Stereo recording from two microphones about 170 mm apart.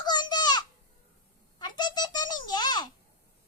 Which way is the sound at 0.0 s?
25° left (ahead or behind).